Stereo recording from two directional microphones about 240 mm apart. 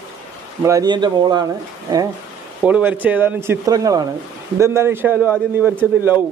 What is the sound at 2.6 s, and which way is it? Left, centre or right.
A man's voice, centre.